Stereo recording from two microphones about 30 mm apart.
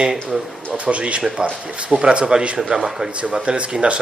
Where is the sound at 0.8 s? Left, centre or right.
Right.